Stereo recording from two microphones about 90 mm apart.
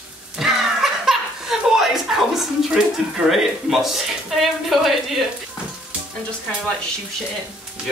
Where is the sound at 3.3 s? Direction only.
Centre (ahead or behind).